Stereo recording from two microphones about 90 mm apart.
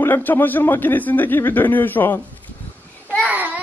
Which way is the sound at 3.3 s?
20° right (ahead or behind).